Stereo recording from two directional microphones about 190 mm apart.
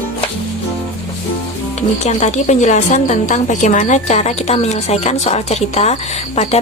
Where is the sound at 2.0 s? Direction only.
35° left (ahead or behind).